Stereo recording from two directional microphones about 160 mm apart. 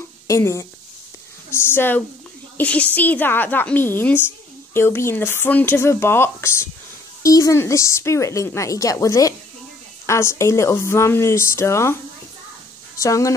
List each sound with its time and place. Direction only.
0.3 s speech: 20° left (ahead or behind)
13.0 s speech: 20° left (ahead or behind)